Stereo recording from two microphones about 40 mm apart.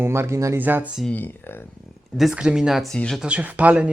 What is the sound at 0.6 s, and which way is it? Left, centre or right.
Speech, right.